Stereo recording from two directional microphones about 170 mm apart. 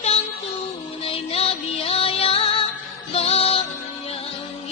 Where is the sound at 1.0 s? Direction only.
35° left (ahead or behind).